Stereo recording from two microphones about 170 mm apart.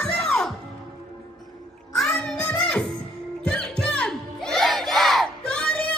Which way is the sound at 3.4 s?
5° left (ahead or behind).